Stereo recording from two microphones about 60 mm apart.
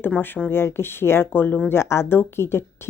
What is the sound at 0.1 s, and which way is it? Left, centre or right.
Speech, centre.